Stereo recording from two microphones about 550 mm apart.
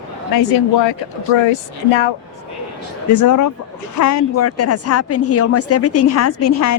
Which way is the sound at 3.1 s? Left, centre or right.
Left.